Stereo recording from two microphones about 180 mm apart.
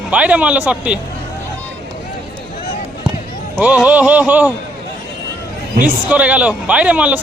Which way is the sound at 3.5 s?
10° right (ahead or behind).